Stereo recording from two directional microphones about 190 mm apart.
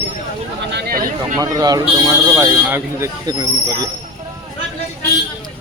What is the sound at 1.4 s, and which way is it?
Speech, 20° right (ahead or behind).